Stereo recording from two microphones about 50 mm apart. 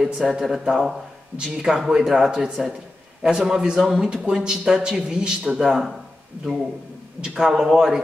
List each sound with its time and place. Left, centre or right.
0.0 s speech: centre
7.2 s speech: centre